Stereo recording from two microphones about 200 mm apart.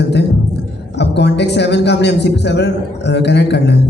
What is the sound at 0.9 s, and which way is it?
A man's voice, 60° left (ahead or behind).